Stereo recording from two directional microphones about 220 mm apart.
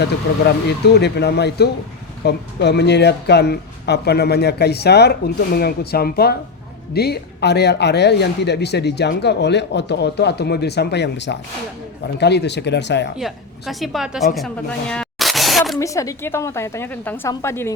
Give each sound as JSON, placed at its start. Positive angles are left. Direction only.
{"t": 0.3, "sound": "speech", "side_deg": 60}
{"t": 13.1, "sound": "a woman's voice", "side_deg": 0}
{"t": 15.8, "sound": "a woman's voice", "side_deg": 15}